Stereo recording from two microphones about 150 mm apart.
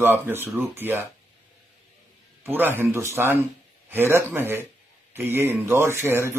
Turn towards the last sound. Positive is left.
turn(degrees=-15)  # may be behind; listen again after turning